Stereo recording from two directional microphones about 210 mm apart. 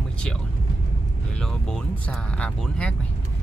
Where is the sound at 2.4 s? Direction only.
5° left (ahead or behind).